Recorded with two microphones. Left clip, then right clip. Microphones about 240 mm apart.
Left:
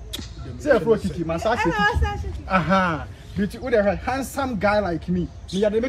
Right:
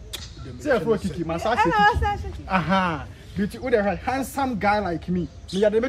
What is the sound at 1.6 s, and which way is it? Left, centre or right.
Speech, centre.